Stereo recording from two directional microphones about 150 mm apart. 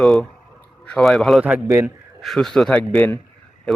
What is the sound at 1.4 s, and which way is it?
Speech, 15° right (ahead or behind).